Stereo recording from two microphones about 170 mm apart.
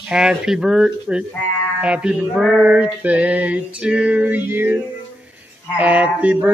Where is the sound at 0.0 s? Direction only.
5° right (ahead or behind).